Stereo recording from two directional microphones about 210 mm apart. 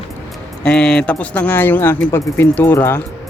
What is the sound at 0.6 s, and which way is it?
Speech, 5° left (ahead or behind).